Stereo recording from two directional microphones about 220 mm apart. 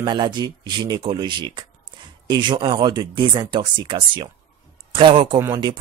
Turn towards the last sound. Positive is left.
turn(degrees=-20)  # may be behind; listen again after turning